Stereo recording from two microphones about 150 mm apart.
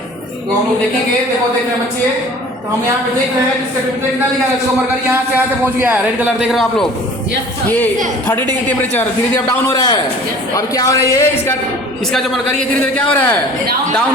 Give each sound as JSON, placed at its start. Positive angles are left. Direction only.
{"t": 6.5, "sound": "a man's voice", "side_deg": 0}
{"t": 8.8, "sound": "a man's voice", "side_deg": 10}
{"t": 9.5, "sound": "speech", "side_deg": 25}
{"t": 12.1, "sound": "a man's voice", "side_deg": 5}